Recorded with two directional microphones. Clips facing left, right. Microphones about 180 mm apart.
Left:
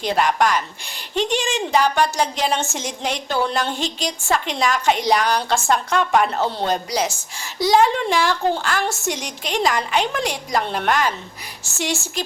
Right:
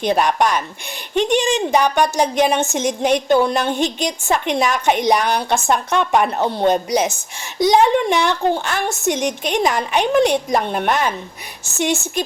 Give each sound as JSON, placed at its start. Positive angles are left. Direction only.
{"t": 0.0, "sound": "a woman's voice", "side_deg": -20}